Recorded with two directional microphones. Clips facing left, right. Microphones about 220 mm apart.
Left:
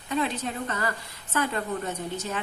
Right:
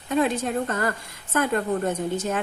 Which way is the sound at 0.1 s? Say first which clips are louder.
Right 6 dB; 50° right (ahead or behind).